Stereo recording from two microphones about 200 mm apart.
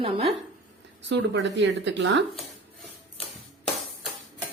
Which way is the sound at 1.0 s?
60° right (ahead or behind).